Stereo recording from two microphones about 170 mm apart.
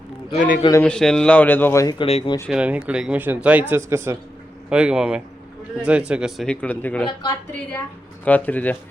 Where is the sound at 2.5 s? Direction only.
5° right (ahead or behind); by 7.1 s 10° left (ahead or behind).